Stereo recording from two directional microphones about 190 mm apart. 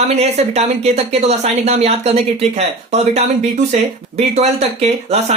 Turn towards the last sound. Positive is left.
turn(degrees=-35)  # may be behind; listen again after turning